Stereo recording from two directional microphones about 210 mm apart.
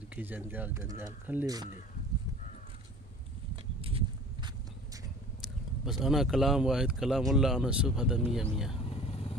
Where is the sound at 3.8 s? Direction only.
25° right (ahead or behind).